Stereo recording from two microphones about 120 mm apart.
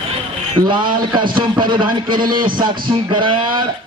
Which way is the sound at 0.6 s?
40° right (ahead or behind).